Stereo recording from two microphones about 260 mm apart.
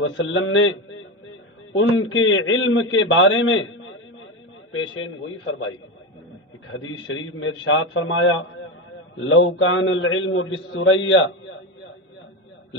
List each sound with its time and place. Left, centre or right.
0.0 s a man's voice: left
6.7 s a man's voice: left